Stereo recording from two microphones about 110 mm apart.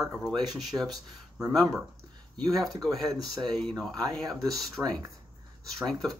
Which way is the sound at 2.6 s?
Centre (ahead or behind).